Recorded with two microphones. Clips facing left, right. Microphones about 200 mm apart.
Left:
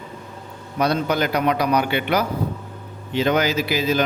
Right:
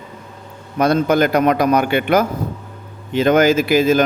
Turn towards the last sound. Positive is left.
turn(degrees=-50)  # may be behind; listen again after turning